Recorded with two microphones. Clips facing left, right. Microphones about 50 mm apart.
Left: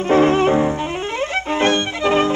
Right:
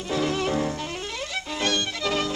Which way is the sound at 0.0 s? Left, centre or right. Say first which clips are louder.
Left 11 dB; left.